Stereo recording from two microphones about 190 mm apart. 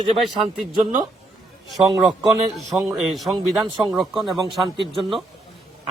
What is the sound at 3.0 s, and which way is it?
Speech, centre (ahead or behind).